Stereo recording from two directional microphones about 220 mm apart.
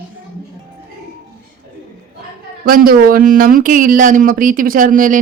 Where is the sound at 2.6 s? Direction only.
40° right (ahead or behind).